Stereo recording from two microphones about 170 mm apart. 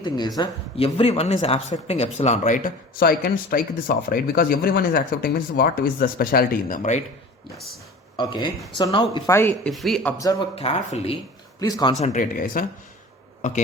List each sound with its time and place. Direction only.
0.0 s speech: 25° left (ahead or behind); by 7.0 s 50° left (ahead or behind)
8.1 s speech: 25° left (ahead or behind)
9.3 s speech: 15° left (ahead or behind)
9.6 s speech: centre (ahead or behind)
10.5 s speech: 35° left (ahead or behind)
11.6 s speech: 25° left (ahead or behind)
11.9 s speech: 45° left (ahead or behind)